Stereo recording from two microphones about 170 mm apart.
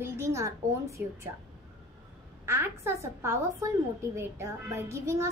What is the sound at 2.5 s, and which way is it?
A woman's voice, 15° right (ahead or behind).